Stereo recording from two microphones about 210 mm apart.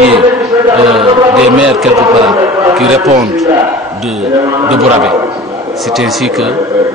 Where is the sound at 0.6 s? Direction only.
25° right (ahead or behind).